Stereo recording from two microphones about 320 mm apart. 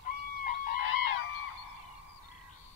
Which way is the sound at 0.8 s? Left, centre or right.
Left.